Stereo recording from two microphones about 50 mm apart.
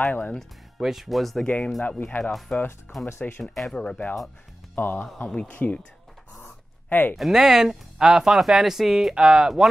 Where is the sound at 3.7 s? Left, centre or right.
Left.